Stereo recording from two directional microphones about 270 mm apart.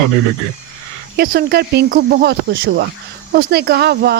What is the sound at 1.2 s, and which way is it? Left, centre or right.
Speech, right.